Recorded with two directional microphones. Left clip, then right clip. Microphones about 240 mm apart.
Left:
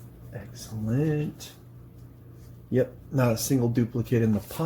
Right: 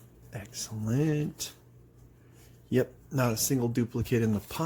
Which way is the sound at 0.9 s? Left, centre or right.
Right.